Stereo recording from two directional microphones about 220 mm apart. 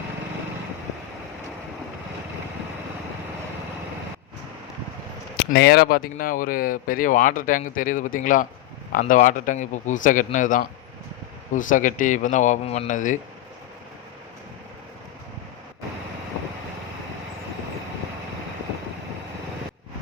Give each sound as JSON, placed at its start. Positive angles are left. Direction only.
{"t": 5.4, "sound": "speech", "side_deg": 45}